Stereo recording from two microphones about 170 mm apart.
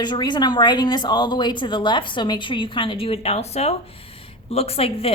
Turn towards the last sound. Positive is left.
turn(degrees=35)  # may be behind; listen again after turning